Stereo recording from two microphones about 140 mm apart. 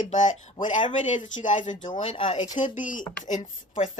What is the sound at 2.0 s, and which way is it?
Speech, 45° left (ahead or behind).